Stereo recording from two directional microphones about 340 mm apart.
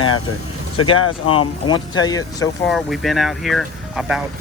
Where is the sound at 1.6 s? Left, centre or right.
Centre.